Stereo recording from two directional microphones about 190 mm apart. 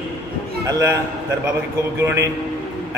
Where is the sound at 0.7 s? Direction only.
15° right (ahead or behind).